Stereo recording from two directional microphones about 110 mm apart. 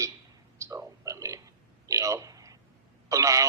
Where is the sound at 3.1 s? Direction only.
30° right (ahead or behind).